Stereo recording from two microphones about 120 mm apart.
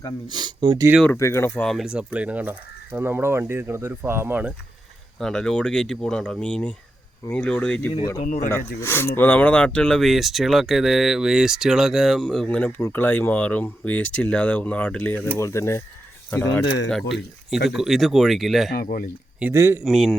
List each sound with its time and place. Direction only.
0.3 s speech: 35° right (ahead or behind)
1.1 s speech: 25° left (ahead or behind)
1.6 s speech: centre (ahead or behind)
5.2 s speech: 5° left (ahead or behind)
15.4 s speech: 25° left (ahead or behind)
17.5 s speech: centre (ahead or behind)
19.4 s speech: 20° right (ahead or behind)
19.8 s speech: centre (ahead or behind)